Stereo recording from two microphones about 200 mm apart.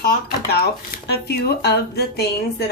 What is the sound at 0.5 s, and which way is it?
A woman's voice, 50° left (ahead or behind).